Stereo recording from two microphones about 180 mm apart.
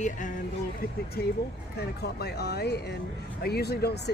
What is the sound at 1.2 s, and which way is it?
Speech, 60° left (ahead or behind).